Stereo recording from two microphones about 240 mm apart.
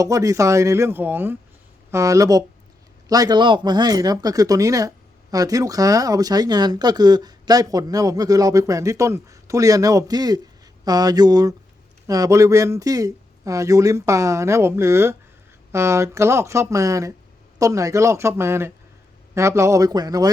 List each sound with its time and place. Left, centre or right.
0.0 s speech: centre